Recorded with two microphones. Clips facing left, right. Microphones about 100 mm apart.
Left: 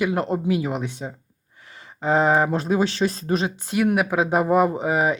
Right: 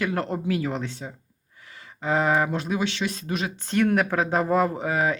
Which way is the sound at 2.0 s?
30° left (ahead or behind).